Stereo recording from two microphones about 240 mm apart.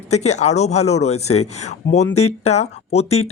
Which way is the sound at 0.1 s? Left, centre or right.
Left.